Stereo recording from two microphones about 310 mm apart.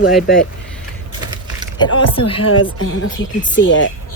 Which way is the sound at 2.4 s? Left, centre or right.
Left.